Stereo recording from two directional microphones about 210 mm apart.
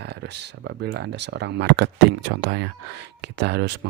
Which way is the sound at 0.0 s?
55° right (ahead or behind).